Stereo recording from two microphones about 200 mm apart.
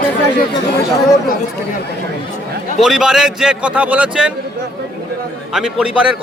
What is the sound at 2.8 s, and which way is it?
A man's voice, centre (ahead or behind).